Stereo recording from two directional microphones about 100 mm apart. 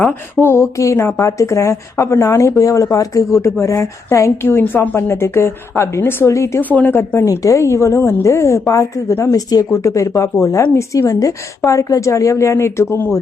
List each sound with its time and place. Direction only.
0.1 s a woman's voice: 25° left (ahead or behind)
6.6 s a woman's voice: 15° left (ahead or behind)
7.3 s a woman's voice: 35° left (ahead or behind)